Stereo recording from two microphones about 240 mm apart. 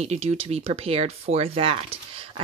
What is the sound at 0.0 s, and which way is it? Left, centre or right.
Speech, right.